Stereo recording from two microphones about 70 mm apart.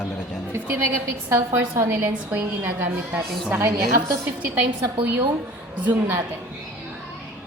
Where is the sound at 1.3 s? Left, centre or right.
Right.